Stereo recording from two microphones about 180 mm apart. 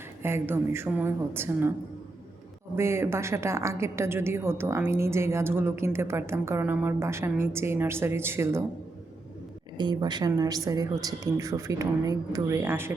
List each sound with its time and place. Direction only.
0.2 s a woman's voice: 15° right (ahead or behind)
2.7 s a woman's voice: 15° right (ahead or behind)
9.7 s a woman's voice: 25° right (ahead or behind)